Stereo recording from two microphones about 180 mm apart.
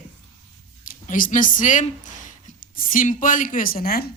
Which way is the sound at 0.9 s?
50° left (ahead or behind).